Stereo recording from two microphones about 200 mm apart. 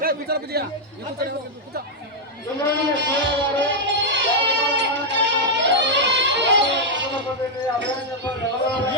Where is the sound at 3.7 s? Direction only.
65° right (ahead or behind).